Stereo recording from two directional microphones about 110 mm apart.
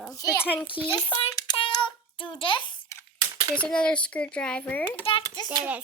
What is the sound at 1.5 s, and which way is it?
Child singing, 40° left (ahead or behind).